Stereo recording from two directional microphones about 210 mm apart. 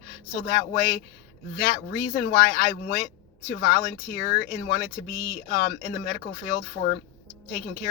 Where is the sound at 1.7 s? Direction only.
40° left (ahead or behind).